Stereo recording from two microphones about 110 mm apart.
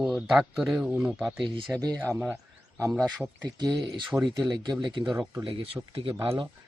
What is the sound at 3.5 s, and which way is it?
Speech, 35° right (ahead or behind).